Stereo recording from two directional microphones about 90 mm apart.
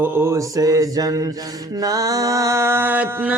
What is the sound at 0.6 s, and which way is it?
Music, 45° right (ahead or behind).